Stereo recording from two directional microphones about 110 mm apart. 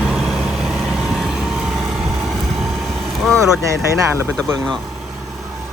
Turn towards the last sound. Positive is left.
turn(degrees=-30)  # may be behind; listen again after turning